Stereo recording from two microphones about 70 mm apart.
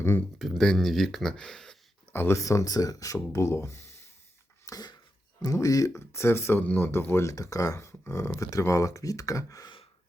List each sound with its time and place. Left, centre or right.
0.3 s speech: centre
2.1 s speech: left
2.4 s speech: left
4.6 s a sound: left
5.4 s speech: left
6.1 s speech: left
7.3 s speech: left
7.8 s speech: left